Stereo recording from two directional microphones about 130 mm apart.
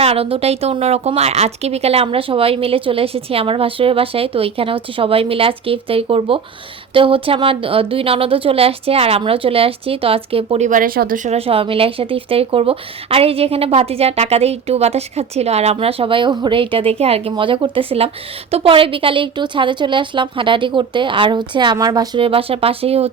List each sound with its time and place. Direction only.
0.0 s speech: 50° right (ahead or behind)
10.7 s speech: 90° right
11.3 s a woman's voice: 45° right (ahead or behind)